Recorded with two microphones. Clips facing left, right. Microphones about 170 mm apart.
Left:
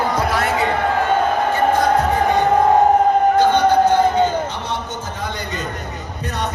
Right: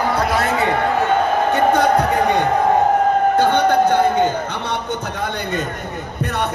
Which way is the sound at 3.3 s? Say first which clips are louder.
Left 1 dB; 55° right (ahead or behind).